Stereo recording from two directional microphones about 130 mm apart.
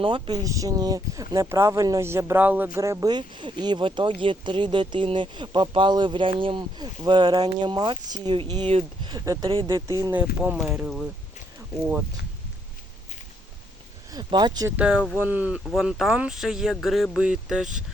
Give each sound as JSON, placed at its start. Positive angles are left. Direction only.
{"t": 0.0, "sound": "speech", "side_deg": -35}
{"t": 10.1, "sound": "speech", "side_deg": -10}
{"t": 14.1, "sound": "speech", "side_deg": -35}
{"t": 14.8, "sound": "speech", "side_deg": -10}